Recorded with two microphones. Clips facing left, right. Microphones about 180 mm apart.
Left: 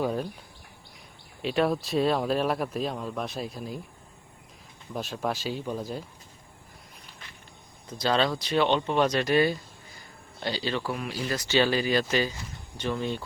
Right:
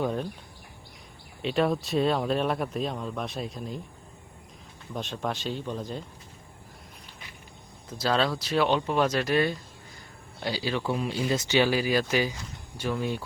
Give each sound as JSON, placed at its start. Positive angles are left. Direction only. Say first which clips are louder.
{"t": 0.0, "sound": "bird", "louder": "left 1 dB", "side_deg": 5}
{"t": 1.4, "sound": "speech", "louder": "even", "side_deg": 0}
{"t": 4.9, "sound": "speech", "louder": "left 1 dB", "side_deg": 5}
{"t": 7.9, "sound": "speech", "louder": "left 1 dB", "side_deg": -5}
{"t": 10.4, "sound": "speech", "louder": "even", "side_deg": -10}
{"t": 10.8, "sound": "speech", "louder": "right 3 dB", "side_deg": -25}
{"t": 11.3, "sound": "speech", "louder": "left 1 dB", "side_deg": -15}